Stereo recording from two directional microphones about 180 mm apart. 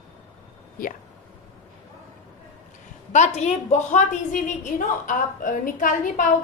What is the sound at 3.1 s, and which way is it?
A woman's voice, 40° left (ahead or behind).